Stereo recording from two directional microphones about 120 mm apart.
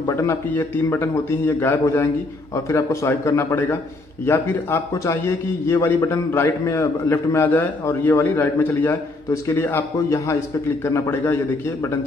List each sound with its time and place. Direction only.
0.1 s a man's voice: 25° left (ahead or behind)